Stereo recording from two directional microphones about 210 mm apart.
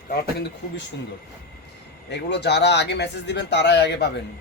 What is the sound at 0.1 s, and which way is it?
Speech, 50° left (ahead or behind).